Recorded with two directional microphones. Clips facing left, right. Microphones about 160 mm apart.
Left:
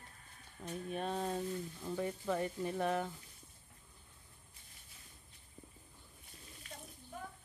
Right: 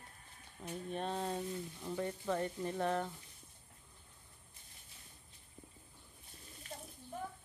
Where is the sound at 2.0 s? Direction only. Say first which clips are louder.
Even; 10° left (ahead or behind).